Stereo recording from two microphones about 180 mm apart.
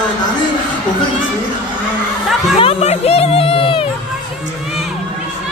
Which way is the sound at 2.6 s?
35° left (ahead or behind).